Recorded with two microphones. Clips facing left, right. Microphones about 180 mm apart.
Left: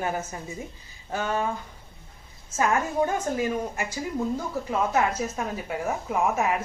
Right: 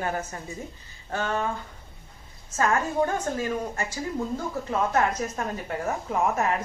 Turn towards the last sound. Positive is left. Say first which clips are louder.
# even
turn(degrees=10)  # may be behind; listen again after turning